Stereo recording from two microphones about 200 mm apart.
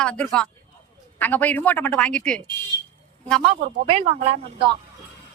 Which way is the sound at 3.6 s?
25° right (ahead or behind).